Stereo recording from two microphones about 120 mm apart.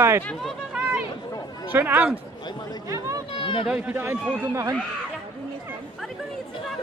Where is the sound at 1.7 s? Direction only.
15° right (ahead or behind).